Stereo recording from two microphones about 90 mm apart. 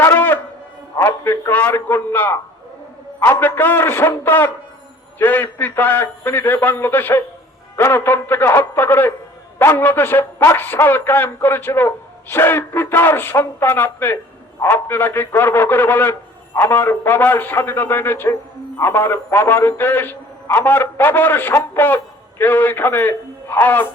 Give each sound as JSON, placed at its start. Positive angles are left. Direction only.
{"t": 0.0, "sound": "wind instrument", "side_deg": 25}
{"t": 0.9, "sound": "a man's voice", "side_deg": 25}